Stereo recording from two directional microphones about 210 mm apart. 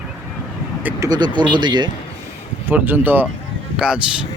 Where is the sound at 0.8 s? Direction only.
15° right (ahead or behind).